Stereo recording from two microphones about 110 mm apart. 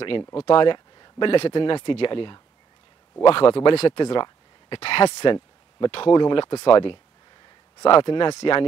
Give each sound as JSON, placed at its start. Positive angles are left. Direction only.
{"t": 0.3, "sound": "speech", "side_deg": 55}
{"t": 1.3, "sound": "speech", "side_deg": 55}
{"t": 6.1, "sound": "speech", "side_deg": 50}